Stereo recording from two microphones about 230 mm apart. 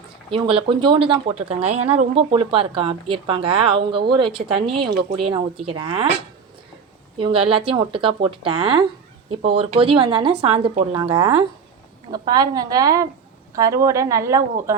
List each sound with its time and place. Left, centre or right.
0.3 s speech: right
7.2 s a woman's voice: right